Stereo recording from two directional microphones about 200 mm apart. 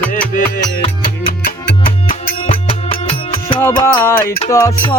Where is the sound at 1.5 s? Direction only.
45° left (ahead or behind).